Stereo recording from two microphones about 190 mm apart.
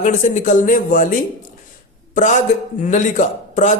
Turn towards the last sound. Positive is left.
turn(degrees=40)  # may be behind; listen again after turning